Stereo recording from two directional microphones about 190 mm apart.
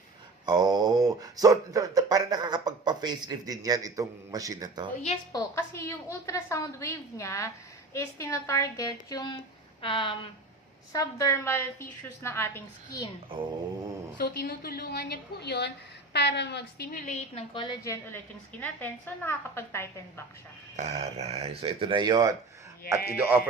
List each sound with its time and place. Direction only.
0.4 s speech: 20° right (ahead or behind)
5.3 s a woman's voice: 15° left (ahead or behind)
10.9 s a woman's voice: 15° left (ahead or behind)
13.3 s speech: 25° right (ahead or behind)
14.2 s a woman's voice: 50° left (ahead or behind)
17.1 s a woman's voice: 35° left (ahead or behind)
17.8 s a woman's voice: 15° left (ahead or behind)
20.7 s speech: 35° right (ahead or behind)